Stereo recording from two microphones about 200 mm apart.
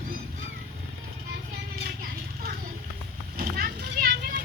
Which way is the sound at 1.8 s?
50° right (ahead or behind).